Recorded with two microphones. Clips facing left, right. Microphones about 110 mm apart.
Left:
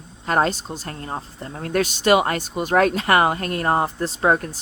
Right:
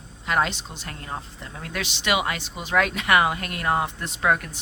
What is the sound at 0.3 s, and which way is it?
A woman's voice, 40° left (ahead or behind).